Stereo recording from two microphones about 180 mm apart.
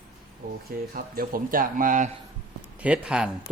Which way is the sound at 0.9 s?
55° right (ahead or behind).